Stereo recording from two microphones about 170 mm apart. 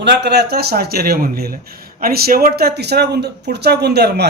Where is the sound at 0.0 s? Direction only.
80° right.